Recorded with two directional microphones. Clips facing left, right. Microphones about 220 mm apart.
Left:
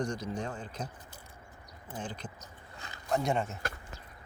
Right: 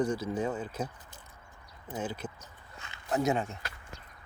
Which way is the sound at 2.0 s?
5° right (ahead or behind).